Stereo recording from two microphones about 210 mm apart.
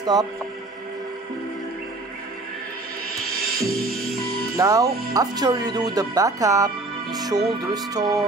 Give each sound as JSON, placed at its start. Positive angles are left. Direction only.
{"t": 0.0, "sound": "speech", "side_deg": -15}
{"t": 3.5, "sound": "music", "side_deg": -45}
{"t": 4.6, "sound": "speech", "side_deg": -15}